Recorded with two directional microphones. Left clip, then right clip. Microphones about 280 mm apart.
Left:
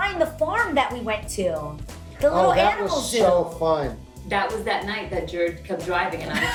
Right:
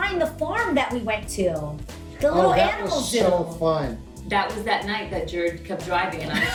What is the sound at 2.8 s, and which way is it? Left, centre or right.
Speech, left.